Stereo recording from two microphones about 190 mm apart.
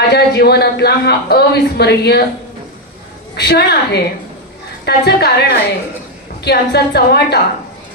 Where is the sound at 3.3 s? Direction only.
60° left (ahead or behind).